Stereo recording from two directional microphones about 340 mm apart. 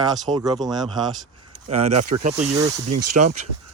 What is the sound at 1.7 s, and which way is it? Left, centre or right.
Speech, centre.